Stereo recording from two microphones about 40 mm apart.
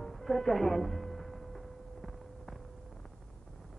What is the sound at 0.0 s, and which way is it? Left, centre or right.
Music, centre.